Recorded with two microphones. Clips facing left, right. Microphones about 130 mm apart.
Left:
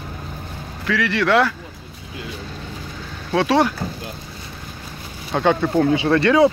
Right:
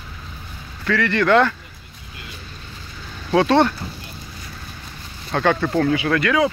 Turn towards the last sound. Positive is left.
turn(degrees=30)  # may be behind; listen again after turning